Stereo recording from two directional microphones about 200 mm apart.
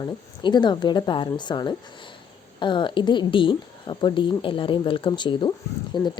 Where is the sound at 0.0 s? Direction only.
20° left (ahead or behind).